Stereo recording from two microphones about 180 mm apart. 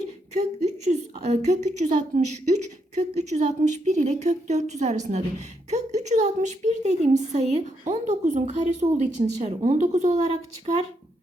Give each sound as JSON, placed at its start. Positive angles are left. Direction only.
{"t": 0.3, "sound": "a woman's voice", "side_deg": -40}